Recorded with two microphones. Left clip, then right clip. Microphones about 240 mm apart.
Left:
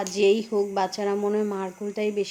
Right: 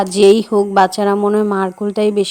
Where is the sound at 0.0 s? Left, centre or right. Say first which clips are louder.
Right 11 dB; right.